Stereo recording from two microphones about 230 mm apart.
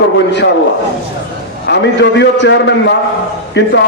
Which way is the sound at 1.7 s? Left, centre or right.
Left.